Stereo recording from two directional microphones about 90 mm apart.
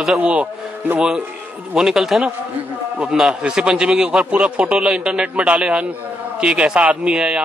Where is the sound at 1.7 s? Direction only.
5° right (ahead or behind).